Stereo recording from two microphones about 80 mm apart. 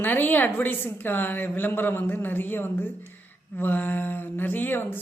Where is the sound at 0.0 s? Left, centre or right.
Left.